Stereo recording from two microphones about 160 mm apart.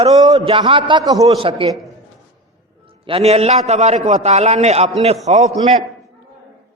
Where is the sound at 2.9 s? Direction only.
35° right (ahead or behind).